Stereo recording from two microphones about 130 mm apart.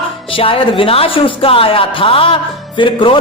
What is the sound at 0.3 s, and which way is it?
A man's voice, 45° left (ahead or behind).